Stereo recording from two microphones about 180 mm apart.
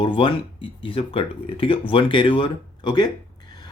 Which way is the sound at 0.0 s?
30° left (ahead or behind).